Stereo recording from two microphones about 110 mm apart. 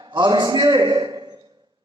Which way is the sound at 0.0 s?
40° right (ahead or behind).